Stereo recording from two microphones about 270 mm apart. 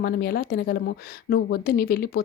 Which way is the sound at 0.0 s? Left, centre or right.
Left.